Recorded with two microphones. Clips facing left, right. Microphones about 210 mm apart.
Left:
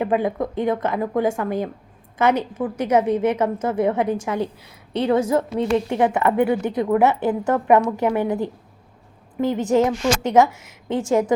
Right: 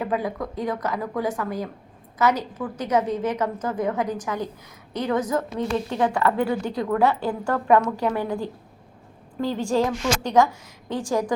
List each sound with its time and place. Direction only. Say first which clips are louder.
0.0 s a woman's voice: left 5 dB; 25° left (ahead or behind)